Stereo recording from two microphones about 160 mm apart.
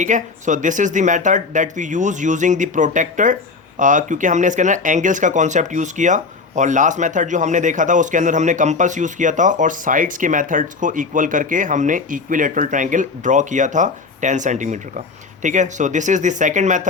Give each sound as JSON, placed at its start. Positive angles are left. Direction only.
{"t": 0.0, "sound": "speech", "side_deg": -50}